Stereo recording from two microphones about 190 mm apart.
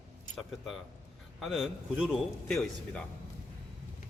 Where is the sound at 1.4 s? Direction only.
Centre (ahead or behind).